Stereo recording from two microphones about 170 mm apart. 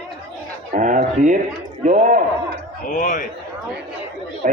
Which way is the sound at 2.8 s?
50° left (ahead or behind).